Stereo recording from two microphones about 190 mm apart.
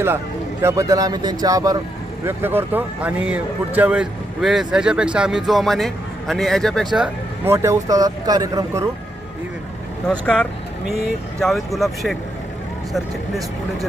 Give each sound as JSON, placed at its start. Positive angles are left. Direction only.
{"t": 0.6, "sound": "speech", "side_deg": -15}
{"t": 10.1, "sound": "speech", "side_deg": 5}